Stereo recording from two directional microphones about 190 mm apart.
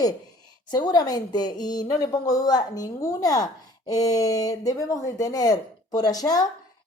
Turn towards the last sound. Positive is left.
turn(degrees=20)  # may be behind; listen again after turning